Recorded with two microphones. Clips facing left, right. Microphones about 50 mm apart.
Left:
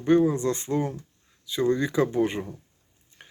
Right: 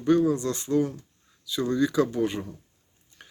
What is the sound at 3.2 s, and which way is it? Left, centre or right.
Stir, centre.